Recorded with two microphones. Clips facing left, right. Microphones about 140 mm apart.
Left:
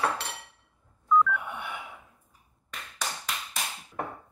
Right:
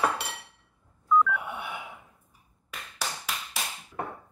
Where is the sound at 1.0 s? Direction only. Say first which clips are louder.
Even; 5° right (ahead or behind).